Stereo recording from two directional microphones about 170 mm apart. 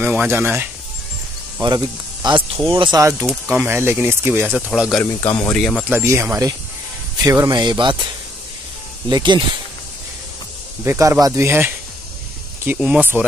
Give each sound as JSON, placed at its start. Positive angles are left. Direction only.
{"t": 0.0, "sound": "speech", "side_deg": -10}
{"t": 2.2, "sound": "speech", "side_deg": -30}
{"t": 5.2, "sound": "speech", "side_deg": 15}
{"t": 5.5, "sound": "speech", "side_deg": 0}
{"t": 5.9, "sound": "speech", "side_deg": -15}
{"t": 9.1, "sound": "speech", "side_deg": -25}
{"t": 10.8, "sound": "speech", "side_deg": -15}